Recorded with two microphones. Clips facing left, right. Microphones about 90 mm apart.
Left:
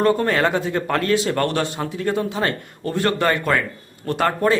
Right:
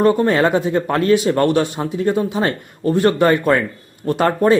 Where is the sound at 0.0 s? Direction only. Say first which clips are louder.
Right 4 dB; 15° right (ahead or behind).